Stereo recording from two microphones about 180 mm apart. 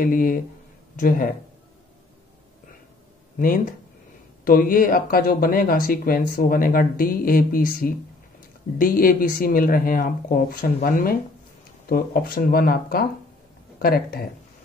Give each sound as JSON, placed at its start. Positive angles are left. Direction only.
{"t": 0.0, "sound": "speech", "side_deg": 50}
{"t": 3.3, "sound": "speech", "side_deg": 50}